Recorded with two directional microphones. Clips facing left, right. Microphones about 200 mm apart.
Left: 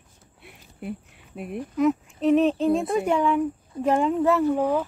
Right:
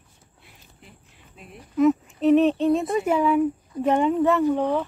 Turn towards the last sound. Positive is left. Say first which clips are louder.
# even
turn(degrees=5)  # may be behind; listen again after turning